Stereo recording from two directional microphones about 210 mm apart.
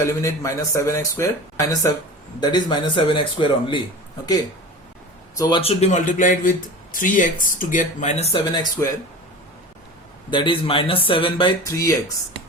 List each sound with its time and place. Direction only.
0.2 s speech: 15° left (ahead or behind)
5.3 s speech: 20° left (ahead or behind)
10.2 s speech: 20° left (ahead or behind)